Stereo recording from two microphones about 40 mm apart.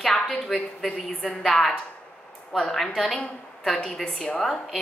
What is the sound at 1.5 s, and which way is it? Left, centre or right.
Speech, centre.